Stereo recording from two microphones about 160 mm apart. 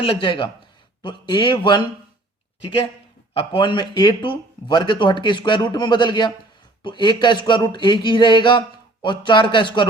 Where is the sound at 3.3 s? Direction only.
30° left (ahead or behind).